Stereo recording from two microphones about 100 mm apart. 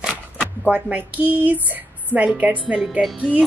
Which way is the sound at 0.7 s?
15° right (ahead or behind).